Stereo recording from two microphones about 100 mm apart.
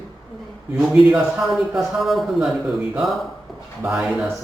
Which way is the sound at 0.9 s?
5° right (ahead or behind).